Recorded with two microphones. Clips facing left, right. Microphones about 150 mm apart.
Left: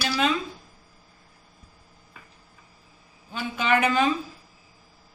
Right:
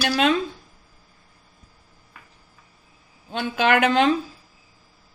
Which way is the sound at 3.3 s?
75° right (ahead or behind).